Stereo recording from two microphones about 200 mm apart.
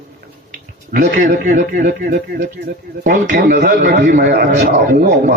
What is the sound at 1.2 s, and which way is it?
A man's voice, 40° right (ahead or behind).